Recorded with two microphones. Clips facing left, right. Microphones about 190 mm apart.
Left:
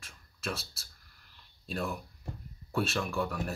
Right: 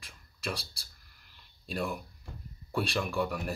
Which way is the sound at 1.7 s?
5° right (ahead or behind).